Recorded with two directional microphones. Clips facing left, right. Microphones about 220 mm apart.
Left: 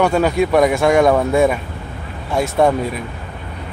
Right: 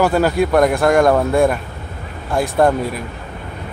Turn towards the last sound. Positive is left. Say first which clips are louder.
# even
turn(degrees=0)  # may be behind; listen again after turning